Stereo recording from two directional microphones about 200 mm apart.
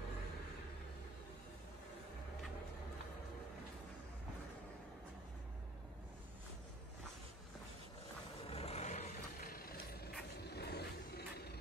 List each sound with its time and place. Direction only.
8.5 s vehicle: 30° left (ahead or behind); by 11.4 s 55° left (ahead or behind)